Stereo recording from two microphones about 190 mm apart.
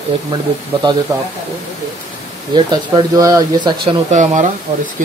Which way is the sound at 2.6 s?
25° right (ahead or behind).